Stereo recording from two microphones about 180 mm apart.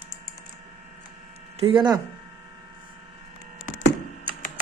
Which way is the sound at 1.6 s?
30° right (ahead or behind).